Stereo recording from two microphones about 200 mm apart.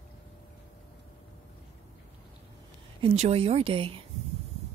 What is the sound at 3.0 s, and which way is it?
Speech, 30° right (ahead or behind).